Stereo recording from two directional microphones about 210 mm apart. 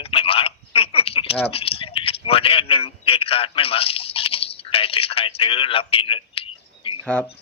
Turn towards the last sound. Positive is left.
turn(degrees=25)  # may be behind; listen again after turning